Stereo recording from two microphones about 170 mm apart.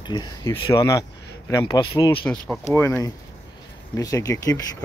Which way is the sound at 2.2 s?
10° left (ahead or behind).